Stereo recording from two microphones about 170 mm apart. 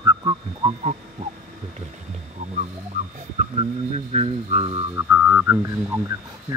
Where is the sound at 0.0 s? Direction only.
25° right (ahead or behind).